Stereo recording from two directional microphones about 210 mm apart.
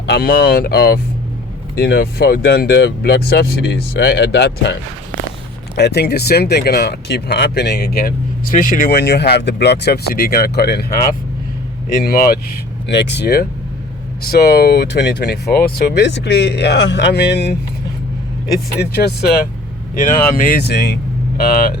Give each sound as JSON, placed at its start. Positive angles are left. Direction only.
{"t": 0.0, "sound": "speech", "side_deg": 50}
{"t": 12.0, "sound": "speech", "side_deg": 45}
{"t": 18.8, "sound": "speech", "side_deg": 50}